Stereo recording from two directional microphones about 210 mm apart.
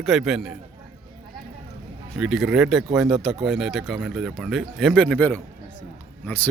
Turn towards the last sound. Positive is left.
turn(degrees=10)  # may be behind; listen again after turning